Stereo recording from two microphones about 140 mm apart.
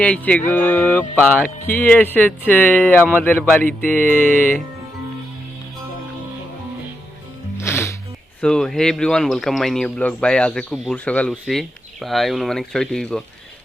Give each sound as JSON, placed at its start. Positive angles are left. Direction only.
{"t": 0.0, "sound": "speech", "side_deg": 10}
{"t": 7.6, "sound": "music", "side_deg": 20}
{"t": 8.4, "sound": "a man's voice", "side_deg": 5}